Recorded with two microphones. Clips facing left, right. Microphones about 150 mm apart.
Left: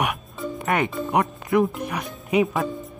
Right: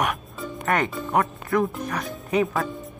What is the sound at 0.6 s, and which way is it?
Speech, 10° left (ahead or behind).